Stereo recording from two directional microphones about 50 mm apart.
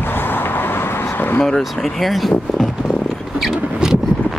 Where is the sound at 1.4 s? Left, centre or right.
Centre.